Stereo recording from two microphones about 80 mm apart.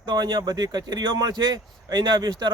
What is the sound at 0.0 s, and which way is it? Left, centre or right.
Speech, right.